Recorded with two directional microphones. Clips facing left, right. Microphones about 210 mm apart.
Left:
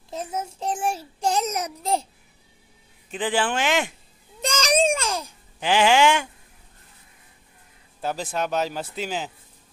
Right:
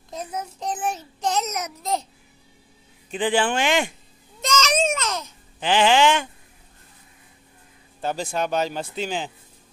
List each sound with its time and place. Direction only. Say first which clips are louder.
0.7 s babbling: left 1 dB; 30° left (ahead or behind)
0.9 s speech: left 1 dB; 10° left (ahead or behind)
1.5 s a child's voice: left 2 dB; 30° left (ahead or behind)
3.1 s speech: right 3 dB; centre (ahead or behind)
4.6 s speech: left 5 dB; 15° left (ahead or behind)
5.0 s babbling: left 1 dB; 30° left (ahead or behind)
5.6 s speech: even; 10° left (ahead or behind)
8.0 s speech: right 1 dB; 5° left (ahead or behind)